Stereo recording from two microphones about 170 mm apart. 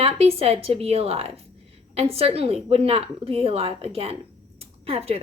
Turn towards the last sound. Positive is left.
turn(degrees=-35)  # may be behind; listen again after turning